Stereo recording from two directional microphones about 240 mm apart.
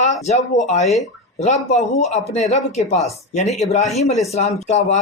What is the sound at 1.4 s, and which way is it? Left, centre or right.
Speech, left.